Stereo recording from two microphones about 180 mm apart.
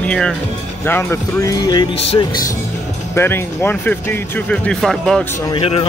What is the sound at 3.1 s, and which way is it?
Speech, 15° left (ahead or behind).